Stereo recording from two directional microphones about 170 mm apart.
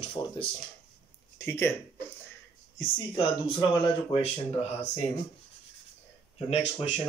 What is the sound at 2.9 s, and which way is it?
Speech, 25° left (ahead or behind).